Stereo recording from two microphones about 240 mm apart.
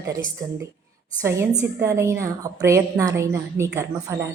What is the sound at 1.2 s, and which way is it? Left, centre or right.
A woman's voice, centre.